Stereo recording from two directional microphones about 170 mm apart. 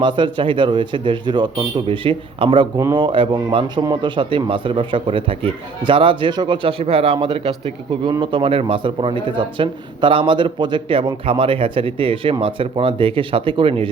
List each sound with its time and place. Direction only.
0.0 s a man's voice: 30° right (ahead or behind)